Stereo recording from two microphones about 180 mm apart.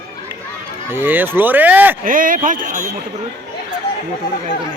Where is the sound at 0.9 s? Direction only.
10° right (ahead or behind).